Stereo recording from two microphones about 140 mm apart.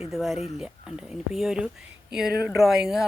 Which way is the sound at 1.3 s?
5° right (ahead or behind).